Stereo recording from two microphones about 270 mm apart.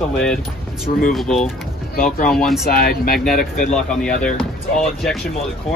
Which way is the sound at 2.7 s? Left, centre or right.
Left.